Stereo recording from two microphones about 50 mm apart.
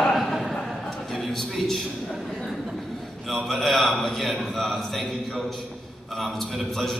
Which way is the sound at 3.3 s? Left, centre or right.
Centre.